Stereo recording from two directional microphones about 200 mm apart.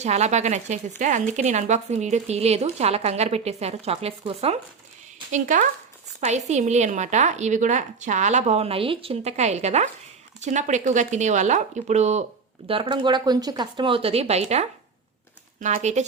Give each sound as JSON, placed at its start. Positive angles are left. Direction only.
{"t": 0.0, "sound": "speech", "side_deg": -35}